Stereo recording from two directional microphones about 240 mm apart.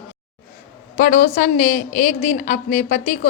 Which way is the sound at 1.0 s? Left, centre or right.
Left.